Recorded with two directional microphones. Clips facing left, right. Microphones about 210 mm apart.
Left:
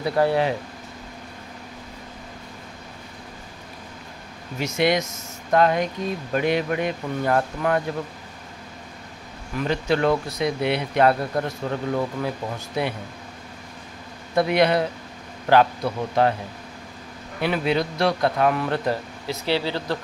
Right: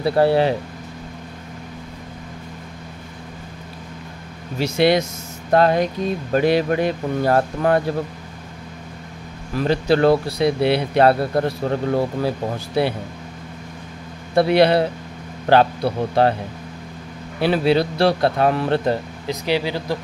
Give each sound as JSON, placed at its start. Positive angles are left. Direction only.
{"t": 0.0, "sound": "speech", "side_deg": -30}
{"t": 4.6, "sound": "speech", "side_deg": -30}
{"t": 9.6, "sound": "speech", "side_deg": -35}
{"t": 14.3, "sound": "speech", "side_deg": -30}
{"t": 17.4, "sound": "speech", "side_deg": -30}
{"t": 19.2, "sound": "speech", "side_deg": -15}